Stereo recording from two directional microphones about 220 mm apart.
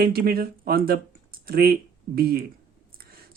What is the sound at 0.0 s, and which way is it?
Speech, 45° right (ahead or behind).